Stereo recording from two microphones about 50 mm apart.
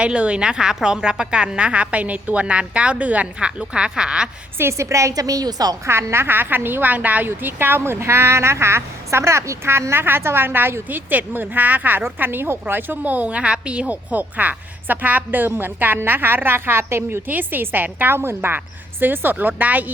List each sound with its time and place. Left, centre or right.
0.0 s a woman's voice: right
3.6 s speech: centre
4.5 s a woman's voice: right
4.9 s a woman's voice: right
5.8 s a woman's voice: right
7.4 s a woman's voice: right
10.8 s a woman's voice: right
13.0 s a woman's voice: right